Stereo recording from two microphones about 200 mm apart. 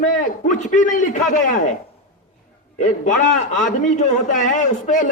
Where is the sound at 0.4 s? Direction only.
40° left (ahead or behind).